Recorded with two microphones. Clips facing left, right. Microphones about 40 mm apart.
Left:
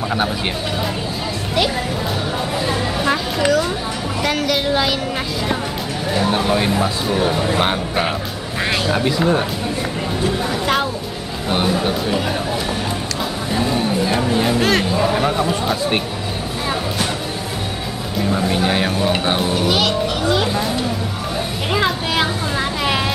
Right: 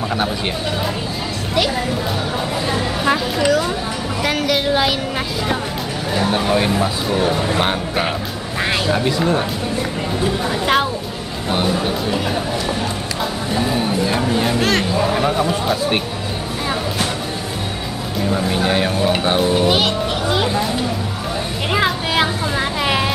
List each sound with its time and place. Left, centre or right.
2.6 s speech: centre
6.1 s speech: centre
10.2 s speech: centre
11.4 s speech: centre
13.5 s speech: centre
18.1 s speech: centre
19.5 s music: centre
20.3 s a sound: centre
21.7 s a sound: centre